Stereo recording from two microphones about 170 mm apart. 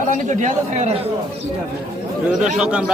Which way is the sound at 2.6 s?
5° right (ahead or behind).